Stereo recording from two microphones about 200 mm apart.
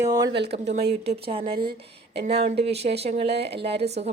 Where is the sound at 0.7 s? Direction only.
30° right (ahead or behind).